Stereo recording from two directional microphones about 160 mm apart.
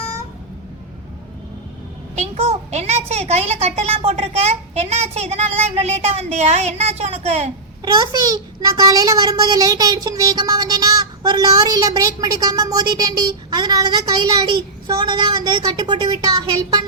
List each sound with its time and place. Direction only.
2.1 s a woman's voice: 40° right (ahead or behind)
7.9 s a child's voice: 25° right (ahead or behind)